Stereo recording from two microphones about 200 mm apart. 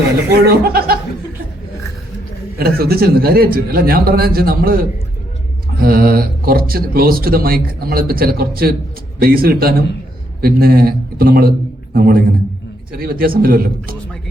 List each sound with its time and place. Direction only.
0.4 s speech: 50° right (ahead or behind)
2.6 s speech: 50° right (ahead or behind)